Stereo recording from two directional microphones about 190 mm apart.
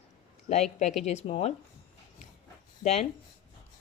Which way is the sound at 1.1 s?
30° left (ahead or behind).